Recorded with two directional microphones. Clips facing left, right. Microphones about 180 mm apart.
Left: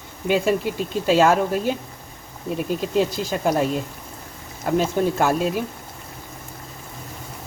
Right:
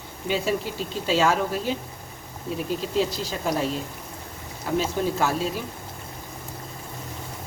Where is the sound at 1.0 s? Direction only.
50° left (ahead or behind).